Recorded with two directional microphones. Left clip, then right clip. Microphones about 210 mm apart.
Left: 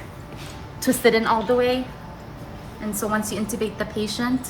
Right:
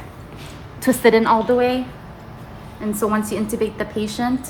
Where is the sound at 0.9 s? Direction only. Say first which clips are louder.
Right 4 dB; 40° right (ahead or behind).